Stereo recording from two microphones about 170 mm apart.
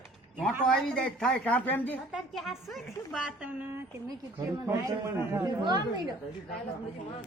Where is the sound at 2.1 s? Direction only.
Centre (ahead or behind).